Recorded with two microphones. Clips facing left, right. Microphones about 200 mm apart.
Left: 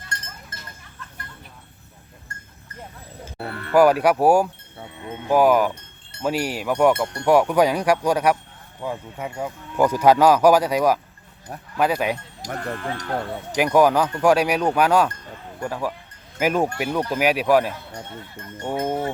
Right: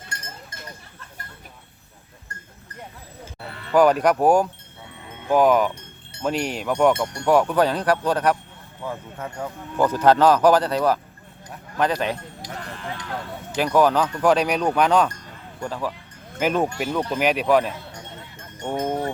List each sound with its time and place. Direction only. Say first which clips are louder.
0.1 s sheep: left 1 dB; 10° right (ahead or behind)
3.3 s a sound: left 8 dB; 55° left (ahead or behind)
3.8 s speech: left 1 dB; 10° left (ahead or behind)
12.4 s speech: left 5 dB; 55° left (ahead or behind)
13.7 s speech: left 1 dB; 10° left (ahead or behind)
16.6 s speech: left 1 dB; 55° left (ahead or behind)
17.1 s speech: left 1 dB; 10° left (ahead or behind)
17.9 s sheep: left 4 dB; 55° left (ahead or behind)
18.6 s speech: even; 10° left (ahead or behind)